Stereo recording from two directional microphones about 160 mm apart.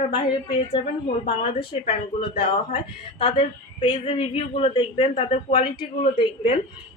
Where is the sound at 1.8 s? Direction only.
35° left (ahead or behind).